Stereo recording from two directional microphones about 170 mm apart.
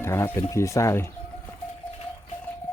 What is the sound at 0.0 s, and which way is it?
Speech, 15° left (ahead or behind).